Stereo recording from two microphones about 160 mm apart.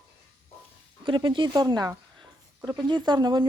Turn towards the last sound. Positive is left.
turn(degrees=-25)  # may be behind; listen again after turning